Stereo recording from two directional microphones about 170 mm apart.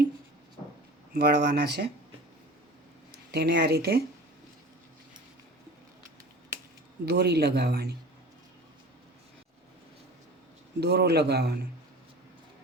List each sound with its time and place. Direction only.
1.1 s speech: 70° right (ahead or behind)
3.3 s speech: 75° right (ahead or behind)
7.0 s speech: 75° right (ahead or behind)
10.8 s speech: 75° right (ahead or behind)